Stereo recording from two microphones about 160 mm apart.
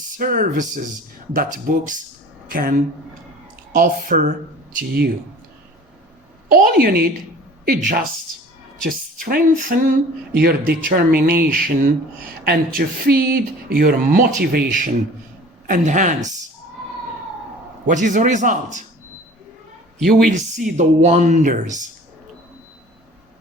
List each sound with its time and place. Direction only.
0.2 s speech: 60° right (ahead or behind)
6.5 s speech: 70° right (ahead or behind)
7.6 s speech: 60° right (ahead or behind)
9.2 s speech: 60° right (ahead or behind)
10.3 s speech: 75° right (ahead or behind); by 16.3 s 50° right (ahead or behind)
17.8 s speech: 50° right (ahead or behind)
20.1 s speech: 55° right (ahead or behind)